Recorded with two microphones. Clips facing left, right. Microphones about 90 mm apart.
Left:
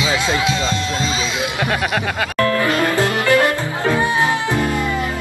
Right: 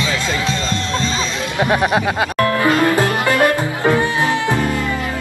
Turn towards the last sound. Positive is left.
turn(degrees=20)  # may be behind; listen again after turning